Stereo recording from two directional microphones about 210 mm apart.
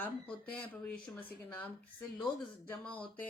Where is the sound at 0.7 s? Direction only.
10° left (ahead or behind).